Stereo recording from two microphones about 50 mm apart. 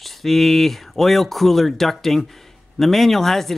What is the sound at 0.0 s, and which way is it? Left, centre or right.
Speech, centre.